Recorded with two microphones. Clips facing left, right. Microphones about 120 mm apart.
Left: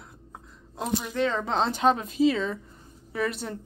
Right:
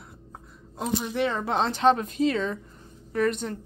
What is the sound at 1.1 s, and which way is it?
Speech, 15° right (ahead or behind).